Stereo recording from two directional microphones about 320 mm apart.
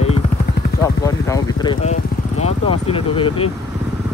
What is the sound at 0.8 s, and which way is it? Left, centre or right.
Speech, centre.